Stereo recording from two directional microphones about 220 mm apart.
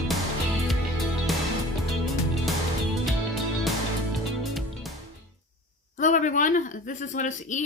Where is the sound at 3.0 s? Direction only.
Centre (ahead or behind).